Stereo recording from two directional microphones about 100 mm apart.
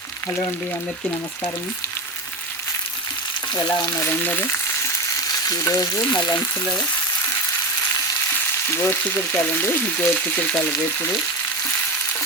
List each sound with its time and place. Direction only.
3.5 s frying: 40° left (ahead or behind)
4.0 s speech: 20° left (ahead or behind)
5.5 s frying: 35° left (ahead or behind)
6.1 s frying: 15° left (ahead or behind)
8.7 s speech: 25° left (ahead or behind)